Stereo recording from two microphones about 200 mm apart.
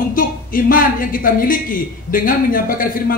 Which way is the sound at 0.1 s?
45° left (ahead or behind).